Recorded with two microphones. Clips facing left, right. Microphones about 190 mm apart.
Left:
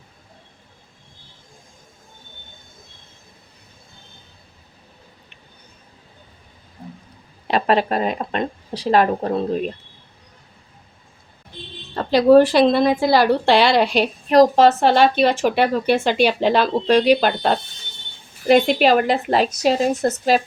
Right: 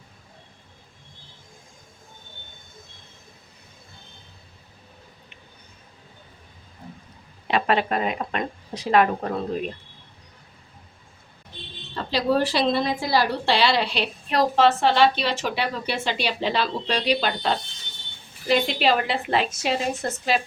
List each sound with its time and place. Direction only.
7.4 s speech: 35° left (ahead or behind)
11.9 s a woman's voice: 50° left (ahead or behind)